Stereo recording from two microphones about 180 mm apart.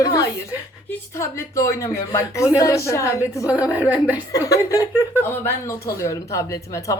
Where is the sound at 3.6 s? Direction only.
10° right (ahead or behind).